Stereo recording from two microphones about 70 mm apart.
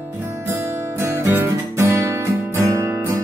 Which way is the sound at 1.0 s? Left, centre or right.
Right.